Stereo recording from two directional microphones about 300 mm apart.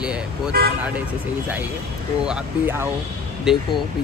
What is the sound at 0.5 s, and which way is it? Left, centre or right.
Speech, right.